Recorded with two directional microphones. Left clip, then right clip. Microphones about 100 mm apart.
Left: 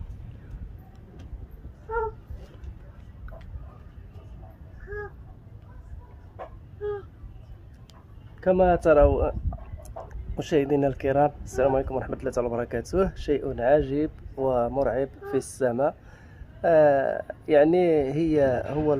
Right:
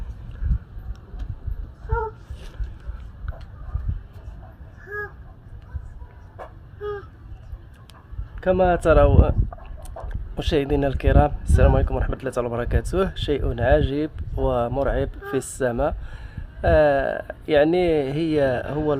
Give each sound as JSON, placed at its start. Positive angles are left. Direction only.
{"t": 8.4, "sound": "speech", "side_deg": -90}
{"t": 10.3, "sound": "speech", "side_deg": -70}